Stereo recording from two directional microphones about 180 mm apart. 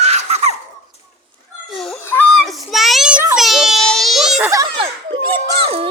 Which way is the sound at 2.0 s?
10° left (ahead or behind).